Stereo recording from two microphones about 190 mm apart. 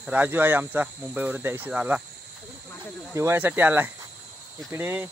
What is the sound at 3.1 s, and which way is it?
Speech, 15° right (ahead or behind).